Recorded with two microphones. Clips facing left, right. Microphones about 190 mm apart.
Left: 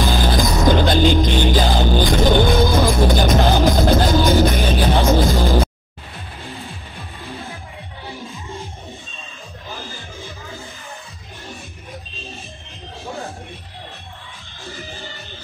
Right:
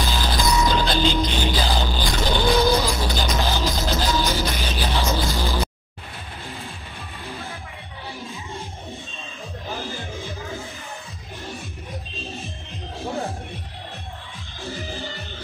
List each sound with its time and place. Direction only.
0.0 s music: 55° left (ahead or behind)
8.3 s music: centre (ahead or behind)
13.0 s music: 15° right (ahead or behind)